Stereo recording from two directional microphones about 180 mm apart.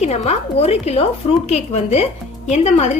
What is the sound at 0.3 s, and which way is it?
A woman's voice, 35° left (ahead or behind).